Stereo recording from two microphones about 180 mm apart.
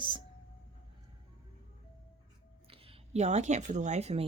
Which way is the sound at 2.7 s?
30° right (ahead or behind).